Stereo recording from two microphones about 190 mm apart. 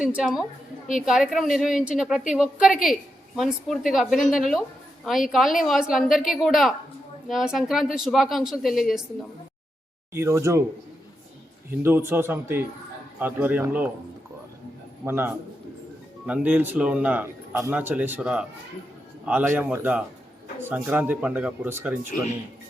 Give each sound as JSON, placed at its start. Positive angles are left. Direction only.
{"t": 0.0, "sound": "a woman's voice", "side_deg": -5}
{"t": 10.1, "sound": "a man's voice", "side_deg": -15}
{"t": 11.7, "sound": "a man's voice", "side_deg": -10}
{"t": 15.0, "sound": "a man's voice", "side_deg": -10}